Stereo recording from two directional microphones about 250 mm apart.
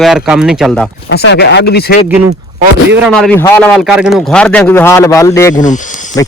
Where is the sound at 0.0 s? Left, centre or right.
Centre.